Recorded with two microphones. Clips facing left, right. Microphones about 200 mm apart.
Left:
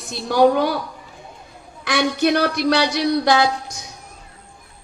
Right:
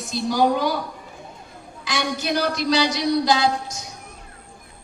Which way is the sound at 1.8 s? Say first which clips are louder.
Left 7 dB; 60° left (ahead or behind).